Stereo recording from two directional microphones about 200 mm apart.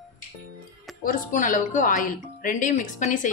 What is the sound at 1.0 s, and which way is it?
Speech, 40° left (ahead or behind).